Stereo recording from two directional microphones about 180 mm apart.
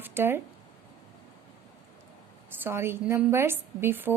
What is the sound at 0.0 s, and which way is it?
Speech, 10° right (ahead or behind).